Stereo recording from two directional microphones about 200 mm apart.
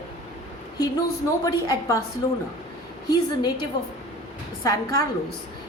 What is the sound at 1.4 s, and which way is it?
Speech, 20° left (ahead or behind).